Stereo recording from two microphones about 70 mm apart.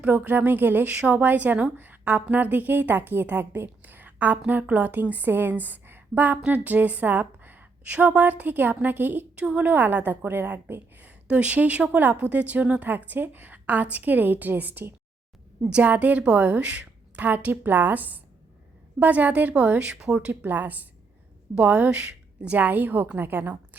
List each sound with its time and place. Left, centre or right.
0.0 s a woman's voice: right
20.4 s a woman's voice: right